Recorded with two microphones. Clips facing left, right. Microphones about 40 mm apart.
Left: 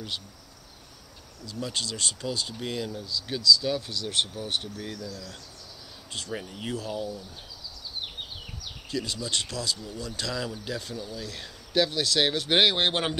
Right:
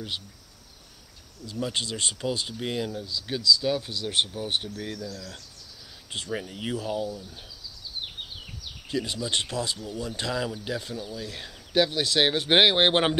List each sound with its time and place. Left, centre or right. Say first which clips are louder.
1.4 s speech: right 3 dB; right
5.0 s speech: right 1 dB; centre
6.1 s speech: right 3 dB; centre
8.9 s speech: right 2 dB; right